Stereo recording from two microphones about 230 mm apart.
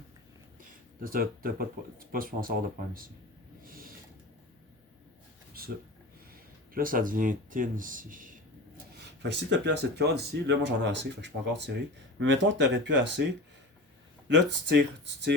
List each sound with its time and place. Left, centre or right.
1.0 s speech: right
3.6 s snort: right
5.5 s a sound: right
6.3 s speech: right
8.9 s speech: right
14.3 s speech: right